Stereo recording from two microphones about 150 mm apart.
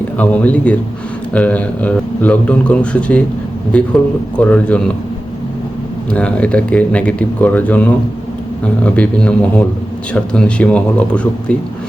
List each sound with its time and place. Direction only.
0.2 s a man's voice: 10° left (ahead or behind)
6.1 s a man's voice: 10° left (ahead or behind)